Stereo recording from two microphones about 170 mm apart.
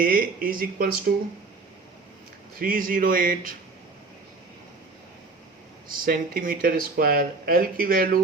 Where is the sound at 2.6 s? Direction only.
55° right (ahead or behind).